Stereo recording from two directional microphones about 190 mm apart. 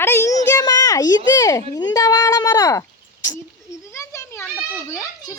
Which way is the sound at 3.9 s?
15° left (ahead or behind).